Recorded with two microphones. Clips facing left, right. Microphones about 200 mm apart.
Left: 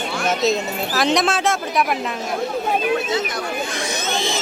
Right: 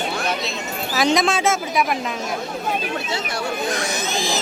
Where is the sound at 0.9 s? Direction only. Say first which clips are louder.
Right 1 dB; centre (ahead or behind).